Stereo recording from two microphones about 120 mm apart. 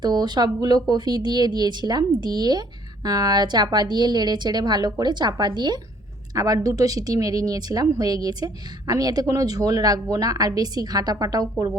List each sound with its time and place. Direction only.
0.0 s speech: 35° right (ahead or behind)